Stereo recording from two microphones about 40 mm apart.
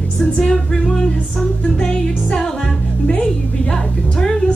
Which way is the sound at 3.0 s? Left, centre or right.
Left.